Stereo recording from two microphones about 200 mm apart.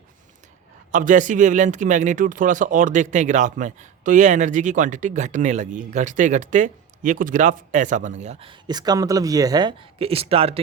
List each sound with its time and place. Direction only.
0.9 s speech: 40° right (ahead or behind)